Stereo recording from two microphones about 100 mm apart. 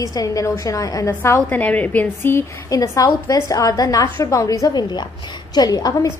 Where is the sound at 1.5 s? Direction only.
15° left (ahead or behind).